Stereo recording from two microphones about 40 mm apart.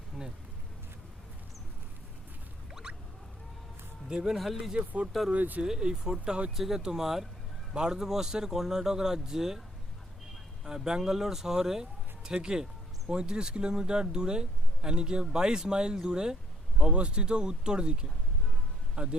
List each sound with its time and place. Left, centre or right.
0.2 s speech: centre
4.1 s speech: centre
4.4 s speech: centre
5.3 s speech: right
5.6 s speech: centre
10.8 s speech: centre